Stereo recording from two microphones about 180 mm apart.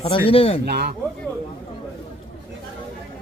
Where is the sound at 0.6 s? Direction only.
65° right (ahead or behind).